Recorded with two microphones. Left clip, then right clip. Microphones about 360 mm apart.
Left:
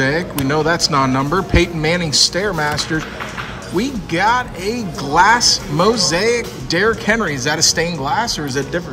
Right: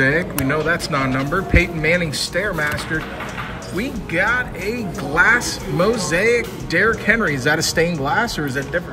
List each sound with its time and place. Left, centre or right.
0.0 s a man's voice: centre